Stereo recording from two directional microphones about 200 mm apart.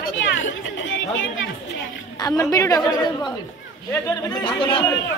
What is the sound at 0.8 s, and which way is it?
Speech, 70° left (ahead or behind).